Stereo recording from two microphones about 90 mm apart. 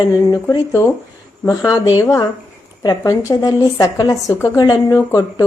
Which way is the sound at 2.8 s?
40° left (ahead or behind).